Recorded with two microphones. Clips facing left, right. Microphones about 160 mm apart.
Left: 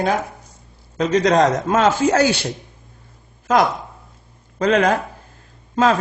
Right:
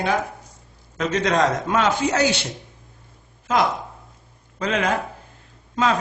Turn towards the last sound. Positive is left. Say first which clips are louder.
# left 4 dB
turn(degrees=40)  # may be behind; listen again after turning